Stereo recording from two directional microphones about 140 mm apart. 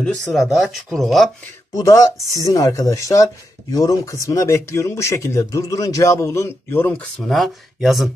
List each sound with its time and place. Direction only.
0.0 s speech: 5° left (ahead or behind)
1.8 s speech: 20° left (ahead or behind)
6.9 s speech: 5° left (ahead or behind)